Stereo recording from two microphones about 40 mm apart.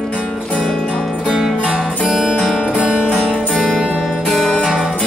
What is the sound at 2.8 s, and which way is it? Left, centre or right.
Music, right.